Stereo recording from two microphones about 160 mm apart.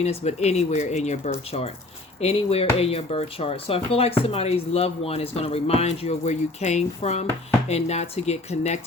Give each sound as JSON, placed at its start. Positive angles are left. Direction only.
{"t": 0.0, "sound": "speech", "side_deg": 45}